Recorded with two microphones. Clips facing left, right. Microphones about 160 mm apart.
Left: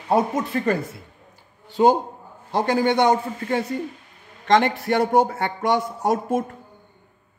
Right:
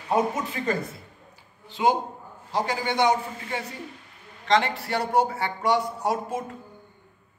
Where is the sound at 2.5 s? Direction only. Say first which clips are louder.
Left 7 dB; 55° left (ahead or behind).